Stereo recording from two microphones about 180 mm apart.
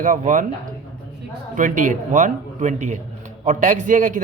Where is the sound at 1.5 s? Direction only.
45° right (ahead or behind).